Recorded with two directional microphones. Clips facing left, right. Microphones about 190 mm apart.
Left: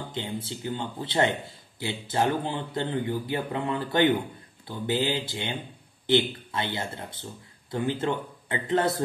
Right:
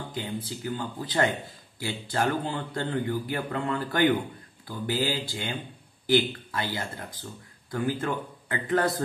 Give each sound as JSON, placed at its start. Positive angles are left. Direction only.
{"t": 0.1, "sound": "speech", "side_deg": 25}